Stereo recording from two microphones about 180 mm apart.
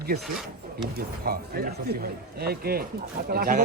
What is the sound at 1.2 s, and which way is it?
Speech, 55° right (ahead or behind).